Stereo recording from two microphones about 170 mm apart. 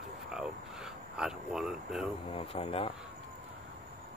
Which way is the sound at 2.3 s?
35° left (ahead or behind).